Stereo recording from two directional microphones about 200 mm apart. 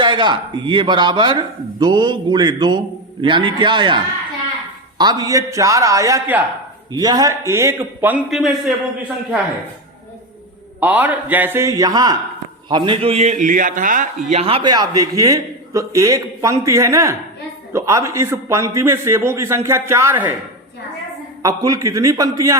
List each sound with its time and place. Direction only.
0.0 s a man's voice: 25° right (ahead or behind); by 8.7 s centre (ahead or behind)
10.8 s a man's voice: 10° right (ahead or behind); by 14.1 s 40° right (ahead or behind)
14.3 s a man's voice: 30° right (ahead or behind); by 20.3 s 10° right (ahead or behind)
21.4 s a man's voice: 15° right (ahead or behind)